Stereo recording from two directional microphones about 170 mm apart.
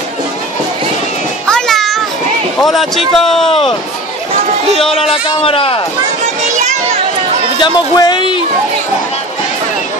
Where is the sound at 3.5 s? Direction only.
30° left (ahead or behind).